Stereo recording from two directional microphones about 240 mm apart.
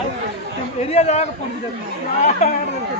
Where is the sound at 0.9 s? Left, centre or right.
Left.